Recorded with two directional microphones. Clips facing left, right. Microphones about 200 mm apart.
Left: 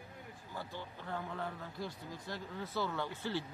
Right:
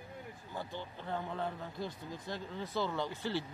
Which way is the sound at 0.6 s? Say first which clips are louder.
Right 3 dB; 20° right (ahead or behind).